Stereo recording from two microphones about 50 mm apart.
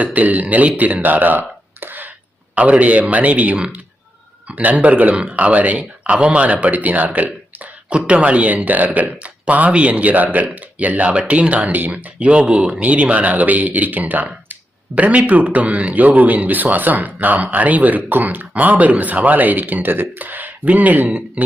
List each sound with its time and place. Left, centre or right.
0.0 s speech: right
0.8 s a sound: right
2.6 s speech: right